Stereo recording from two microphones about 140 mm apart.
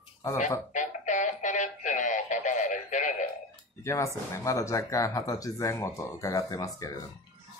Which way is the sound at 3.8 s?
20° left (ahead or behind).